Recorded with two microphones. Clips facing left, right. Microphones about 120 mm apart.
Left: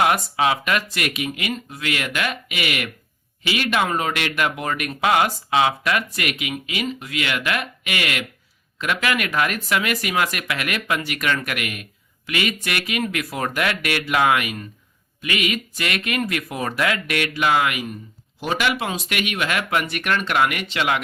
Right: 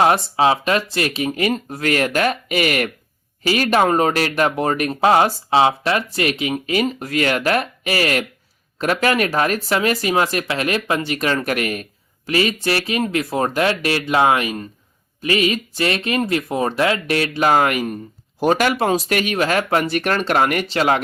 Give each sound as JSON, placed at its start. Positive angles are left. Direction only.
{"t": 0.0, "sound": "speech", "side_deg": -30}